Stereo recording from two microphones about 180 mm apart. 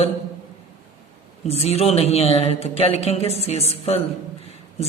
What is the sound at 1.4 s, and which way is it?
A man's voice, 35° left (ahead or behind).